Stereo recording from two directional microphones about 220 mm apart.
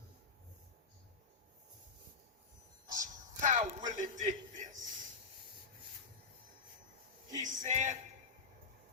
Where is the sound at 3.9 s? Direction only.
35° right (ahead or behind).